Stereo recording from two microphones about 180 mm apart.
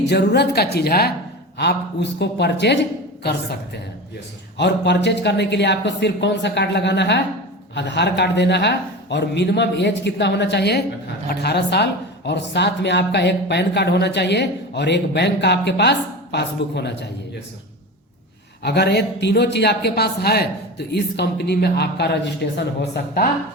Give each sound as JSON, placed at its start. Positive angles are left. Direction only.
{"t": 0.0, "sound": "a woman's voice", "side_deg": 70}
{"t": 4.5, "sound": "a woman's voice", "side_deg": 75}
{"t": 18.6, "sound": "a woman's voice", "side_deg": 65}